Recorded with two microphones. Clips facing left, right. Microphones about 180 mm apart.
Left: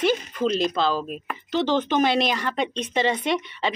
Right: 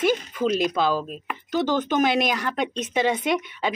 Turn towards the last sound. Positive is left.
turn(degrees=-5)  # may be behind; listen again after turning